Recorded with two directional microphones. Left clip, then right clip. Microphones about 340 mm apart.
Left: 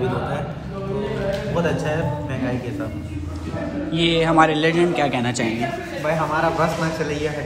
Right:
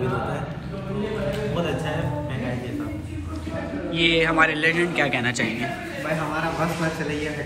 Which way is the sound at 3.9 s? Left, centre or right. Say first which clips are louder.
Left 2 dB; centre.